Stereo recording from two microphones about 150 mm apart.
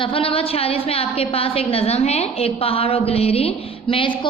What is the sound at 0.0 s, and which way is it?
A woman's voice, 35° left (ahead or behind).